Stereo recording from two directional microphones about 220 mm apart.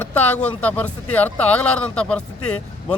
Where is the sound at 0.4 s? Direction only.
5° left (ahead or behind).